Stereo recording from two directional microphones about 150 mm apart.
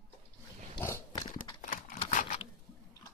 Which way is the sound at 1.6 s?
65° left (ahead or behind).